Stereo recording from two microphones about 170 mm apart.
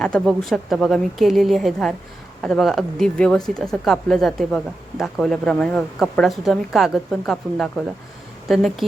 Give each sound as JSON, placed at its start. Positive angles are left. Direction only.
{"t": 0.0, "sound": "speech", "side_deg": 5}